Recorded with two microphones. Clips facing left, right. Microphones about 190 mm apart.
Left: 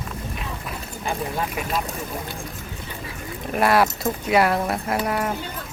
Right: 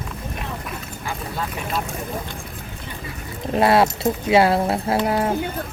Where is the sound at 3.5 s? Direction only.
25° right (ahead or behind).